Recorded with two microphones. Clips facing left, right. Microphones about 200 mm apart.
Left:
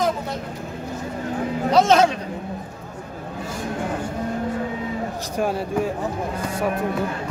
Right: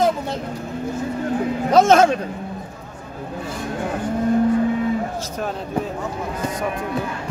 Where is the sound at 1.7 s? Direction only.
50° right (ahead or behind).